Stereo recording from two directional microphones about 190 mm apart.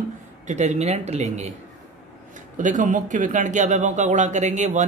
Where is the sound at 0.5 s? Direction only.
40° right (ahead or behind).